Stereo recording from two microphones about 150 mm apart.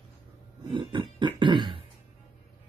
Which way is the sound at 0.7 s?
35° right (ahead or behind).